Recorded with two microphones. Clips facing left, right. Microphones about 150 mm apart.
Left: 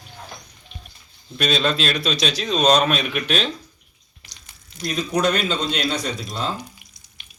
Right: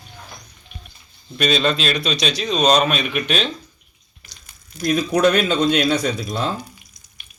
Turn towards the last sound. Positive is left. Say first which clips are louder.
# right 5 dB
turn(degrees=-55)  # may be behind; listen again after turning